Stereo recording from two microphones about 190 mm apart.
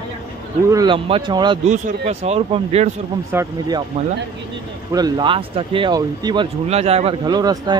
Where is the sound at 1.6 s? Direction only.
40° right (ahead or behind).